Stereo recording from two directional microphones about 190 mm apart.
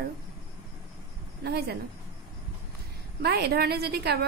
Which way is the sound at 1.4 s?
55° right (ahead or behind).